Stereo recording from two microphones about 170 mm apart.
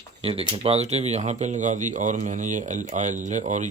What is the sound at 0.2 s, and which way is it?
Speech, 35° right (ahead or behind).